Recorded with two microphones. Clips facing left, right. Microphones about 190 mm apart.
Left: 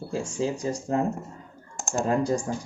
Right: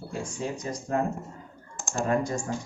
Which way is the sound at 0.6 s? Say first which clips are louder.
Left 4 dB; 30° left (ahead or behind).